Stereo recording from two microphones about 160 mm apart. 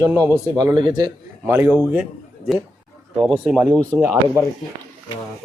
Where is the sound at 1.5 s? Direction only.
15° right (ahead or behind).